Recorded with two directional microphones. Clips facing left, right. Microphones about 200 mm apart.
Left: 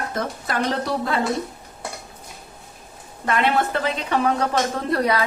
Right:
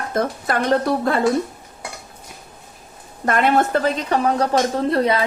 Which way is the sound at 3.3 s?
45° right (ahead or behind).